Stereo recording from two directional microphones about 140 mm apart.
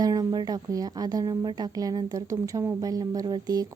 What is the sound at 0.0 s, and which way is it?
A woman's voice, 30° right (ahead or behind).